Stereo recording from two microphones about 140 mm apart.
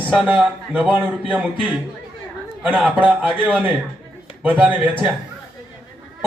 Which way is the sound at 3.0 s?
5° right (ahead or behind).